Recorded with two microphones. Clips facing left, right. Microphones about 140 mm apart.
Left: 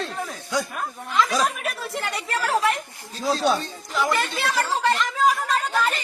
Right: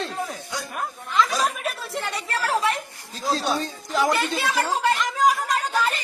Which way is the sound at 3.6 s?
40° right (ahead or behind).